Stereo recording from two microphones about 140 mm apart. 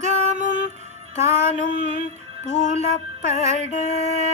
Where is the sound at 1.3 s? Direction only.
50° right (ahead or behind).